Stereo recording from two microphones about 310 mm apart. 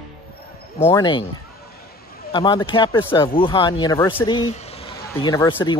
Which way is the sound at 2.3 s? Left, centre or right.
Centre.